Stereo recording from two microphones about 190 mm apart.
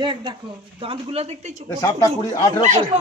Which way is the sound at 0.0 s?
25° right (ahead or behind).